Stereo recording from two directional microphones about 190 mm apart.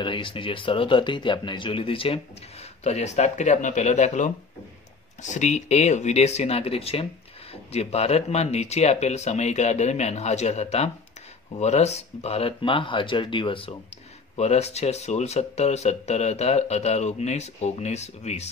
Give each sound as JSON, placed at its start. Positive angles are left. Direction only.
{"t": 0.0, "sound": "speech", "side_deg": 25}